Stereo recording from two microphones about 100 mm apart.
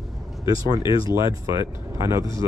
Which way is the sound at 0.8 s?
55° left (ahead or behind).